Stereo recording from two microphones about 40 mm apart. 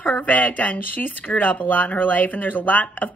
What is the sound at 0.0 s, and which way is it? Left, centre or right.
A woman's voice, left.